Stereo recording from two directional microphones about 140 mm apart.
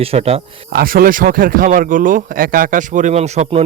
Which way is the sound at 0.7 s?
90° right.